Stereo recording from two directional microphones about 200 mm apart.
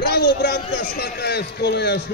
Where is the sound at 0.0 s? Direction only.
55° left (ahead or behind).